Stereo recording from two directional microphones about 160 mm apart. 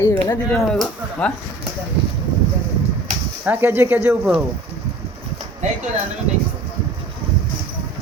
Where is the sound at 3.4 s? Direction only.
15° right (ahead or behind).